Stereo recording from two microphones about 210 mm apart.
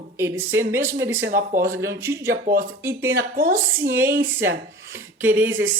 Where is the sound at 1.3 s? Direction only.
40° right (ahead or behind).